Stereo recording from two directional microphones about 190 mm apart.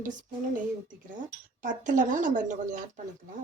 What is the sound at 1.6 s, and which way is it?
A woman's voice, 45° right (ahead or behind).